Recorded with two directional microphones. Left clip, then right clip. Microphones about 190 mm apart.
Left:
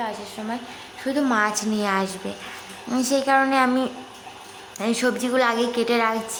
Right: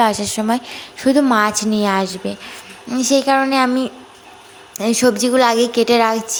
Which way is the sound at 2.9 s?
15° right (ahead or behind).